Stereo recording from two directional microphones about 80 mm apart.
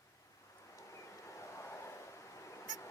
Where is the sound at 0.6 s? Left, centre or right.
Left.